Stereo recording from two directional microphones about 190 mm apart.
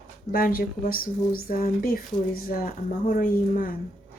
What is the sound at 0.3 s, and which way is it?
Speech, 50° left (ahead or behind).